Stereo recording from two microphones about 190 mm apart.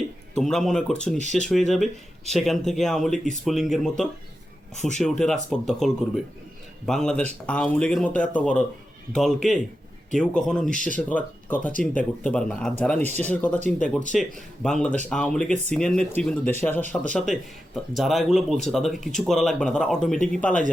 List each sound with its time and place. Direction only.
0.3 s speech: centre (ahead or behind)
4.7 s speech: 40° left (ahead or behind)
4.9 s speech: 5° left (ahead or behind)
10.7 s speech: 40° left (ahead or behind)
10.9 s speech: 10° left (ahead or behind)